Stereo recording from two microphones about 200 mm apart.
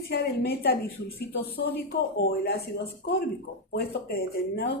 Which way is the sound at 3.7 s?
50° left (ahead or behind).